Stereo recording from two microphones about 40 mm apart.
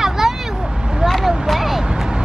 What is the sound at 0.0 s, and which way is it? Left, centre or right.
Vehicle, centre.